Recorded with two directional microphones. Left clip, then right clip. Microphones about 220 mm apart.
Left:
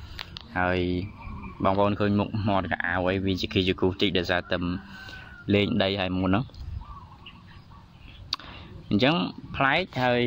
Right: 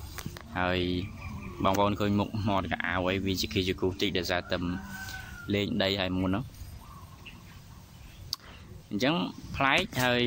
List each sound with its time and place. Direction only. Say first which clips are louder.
0.3 s speech: left 4 dB; 10° left (ahead or behind); by 6.4 s 25° left (ahead or behind)
8.8 s speech: left 5 dB; 25° left (ahead or behind)